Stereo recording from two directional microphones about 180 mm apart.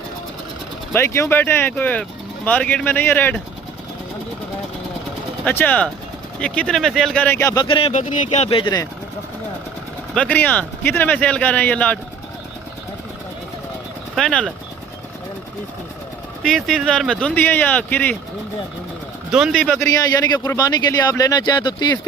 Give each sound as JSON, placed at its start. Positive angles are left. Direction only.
{"t": 0.9, "sound": "speech", "side_deg": 15}
{"t": 5.5, "sound": "speech", "side_deg": 10}
{"t": 10.2, "sound": "speech", "side_deg": 10}
{"t": 14.2, "sound": "speech", "side_deg": 0}
{"t": 16.4, "sound": "speech", "side_deg": 0}
{"t": 19.3, "sound": "speech", "side_deg": -5}
{"t": 20.4, "sound": "speech", "side_deg": 20}